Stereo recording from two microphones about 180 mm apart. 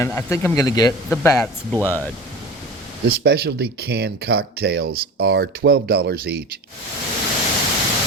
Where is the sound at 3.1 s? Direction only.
60° right (ahead or behind).